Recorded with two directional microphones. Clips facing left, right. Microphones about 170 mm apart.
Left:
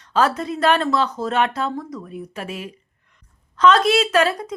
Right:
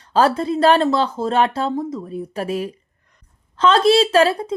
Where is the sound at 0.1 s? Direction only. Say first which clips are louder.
Right 3 dB; 30° right (ahead or behind).